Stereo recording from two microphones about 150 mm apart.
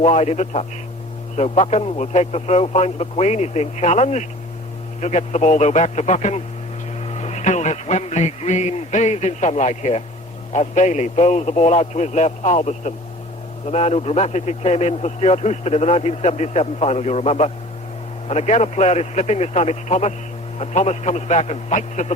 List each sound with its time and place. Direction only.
0.0 s a man's voice: 45° left (ahead or behind)